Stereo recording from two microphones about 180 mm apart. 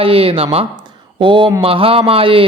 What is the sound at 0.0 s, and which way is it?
Speech, 30° right (ahead or behind).